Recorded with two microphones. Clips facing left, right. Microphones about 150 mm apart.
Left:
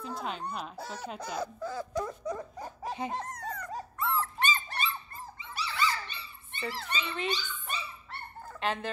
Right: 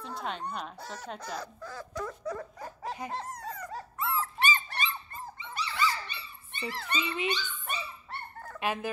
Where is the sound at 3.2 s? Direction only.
5° right (ahead or behind).